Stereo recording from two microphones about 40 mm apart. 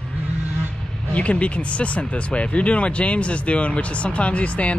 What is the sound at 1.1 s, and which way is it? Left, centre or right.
Speech, left.